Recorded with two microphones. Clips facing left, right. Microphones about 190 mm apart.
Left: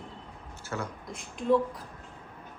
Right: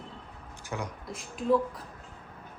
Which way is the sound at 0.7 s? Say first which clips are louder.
Even; 10° right (ahead or behind).